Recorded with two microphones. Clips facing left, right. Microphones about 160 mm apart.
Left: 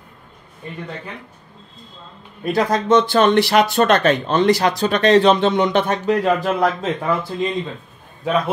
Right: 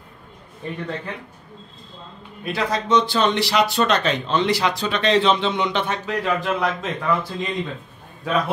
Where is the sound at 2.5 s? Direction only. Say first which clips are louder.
Left 4 dB; 50° left (ahead or behind).